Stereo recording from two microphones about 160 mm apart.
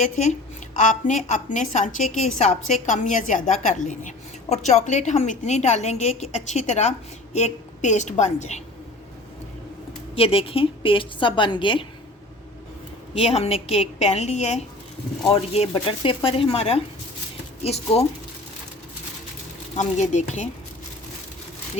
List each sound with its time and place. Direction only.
0.0 s a woman's voice: 45° left (ahead or behind)
10.2 s a woman's voice: 35° left (ahead or behind)
13.1 s a woman's voice: 40° left (ahead or behind)
19.7 s a woman's voice: 45° left (ahead or behind)